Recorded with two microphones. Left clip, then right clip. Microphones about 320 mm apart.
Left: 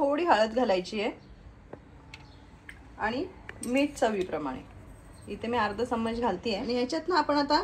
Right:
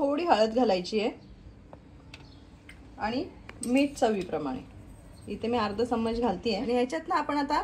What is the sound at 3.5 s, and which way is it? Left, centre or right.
Speech, centre.